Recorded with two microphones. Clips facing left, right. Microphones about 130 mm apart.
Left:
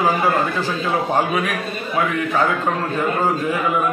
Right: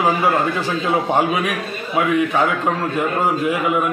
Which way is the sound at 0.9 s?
15° right (ahead or behind).